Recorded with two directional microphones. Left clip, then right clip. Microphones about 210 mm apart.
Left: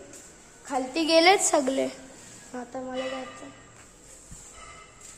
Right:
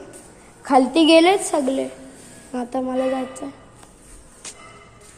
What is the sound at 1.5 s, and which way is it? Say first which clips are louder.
Speech: right 3 dB; 10° left (ahead or behind).